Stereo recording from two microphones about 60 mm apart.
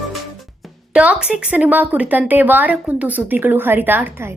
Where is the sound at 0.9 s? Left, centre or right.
Centre.